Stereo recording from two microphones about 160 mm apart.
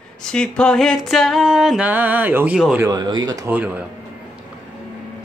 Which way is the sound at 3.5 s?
10° right (ahead or behind).